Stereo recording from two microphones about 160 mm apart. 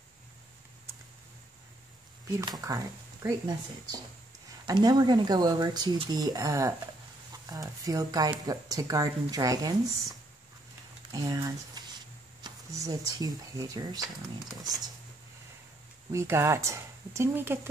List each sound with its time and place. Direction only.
2.4 s speech: 25° right (ahead or behind)
11.1 s speech: 20° right (ahead or behind)
16.1 s speech: 15° right (ahead or behind)